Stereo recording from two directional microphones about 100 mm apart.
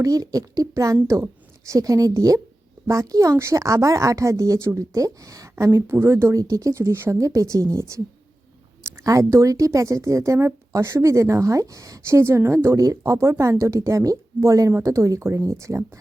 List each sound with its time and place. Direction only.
0.0 s speech: 35° right (ahead or behind)